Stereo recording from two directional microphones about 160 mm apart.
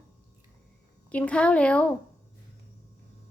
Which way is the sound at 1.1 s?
5° left (ahead or behind).